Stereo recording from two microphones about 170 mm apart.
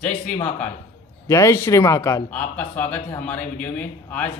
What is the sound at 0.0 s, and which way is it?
Speech, 10° left (ahead or behind).